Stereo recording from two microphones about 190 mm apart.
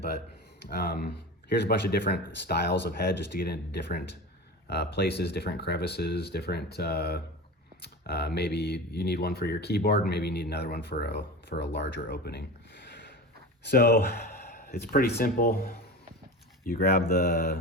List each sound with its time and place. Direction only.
0.7 s speech: 55° left (ahead or behind)